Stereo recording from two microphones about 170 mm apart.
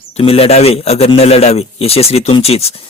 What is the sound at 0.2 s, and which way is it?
A man's voice, 35° left (ahead or behind).